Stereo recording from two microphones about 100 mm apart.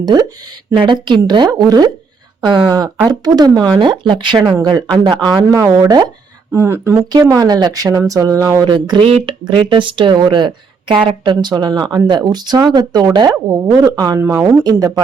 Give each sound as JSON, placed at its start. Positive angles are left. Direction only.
{"t": 0.0, "sound": "speech", "side_deg": -45}
{"t": 2.4, "sound": "speech", "side_deg": -50}
{"t": 3.1, "sound": "speech", "side_deg": -40}
{"t": 3.8, "sound": "speech", "side_deg": -55}
{"t": 5.5, "sound": "speech", "side_deg": -40}
{"t": 6.5, "sound": "speech", "side_deg": -25}
{"t": 7.1, "sound": "speech", "side_deg": -40}
{"t": 8.6, "sound": "speech", "side_deg": -50}
{"t": 9.0, "sound": "speech", "side_deg": -75}
{"t": 9.4, "sound": "speech", "side_deg": -55}
{"t": 13.2, "sound": "speech", "side_deg": -35}
{"t": 14.2, "sound": "speech", "side_deg": -25}